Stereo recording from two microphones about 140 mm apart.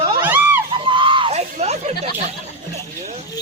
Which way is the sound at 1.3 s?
50° right (ahead or behind).